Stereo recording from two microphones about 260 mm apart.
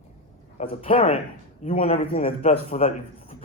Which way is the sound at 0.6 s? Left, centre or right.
Left.